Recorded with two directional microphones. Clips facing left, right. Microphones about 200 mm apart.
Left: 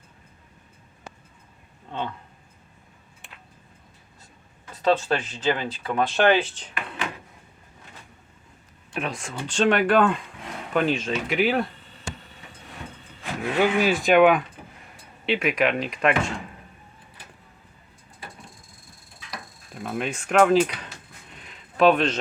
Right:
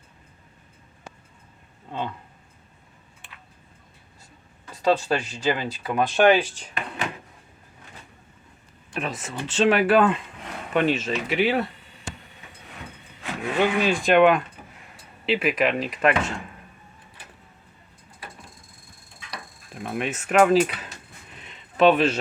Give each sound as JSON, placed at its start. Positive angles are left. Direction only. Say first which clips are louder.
{"t": 1.9, "sound": "speech", "louder": "even", "side_deg": -10}
{"t": 4.8, "sound": "speech", "louder": "even", "side_deg": -10}
{"t": 8.9, "sound": "speech", "louder": "even", "side_deg": 0}
{"t": 13.6, "sound": "speech", "louder": "left 1 dB", "side_deg": 5}
{"t": 19.3, "sound": "a sound", "louder": "even", "side_deg": 0}